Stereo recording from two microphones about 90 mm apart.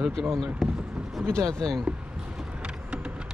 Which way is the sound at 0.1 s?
5° left (ahead or behind).